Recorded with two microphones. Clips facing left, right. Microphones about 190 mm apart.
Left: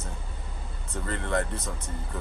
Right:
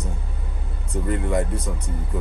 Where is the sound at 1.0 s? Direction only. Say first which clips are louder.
Right 5 dB; 10° right (ahead or behind).